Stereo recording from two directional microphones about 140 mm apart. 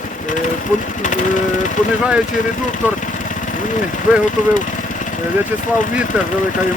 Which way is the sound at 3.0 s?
65° left (ahead or behind).